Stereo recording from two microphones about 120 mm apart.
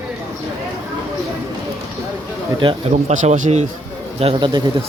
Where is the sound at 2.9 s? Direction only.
75° right (ahead or behind).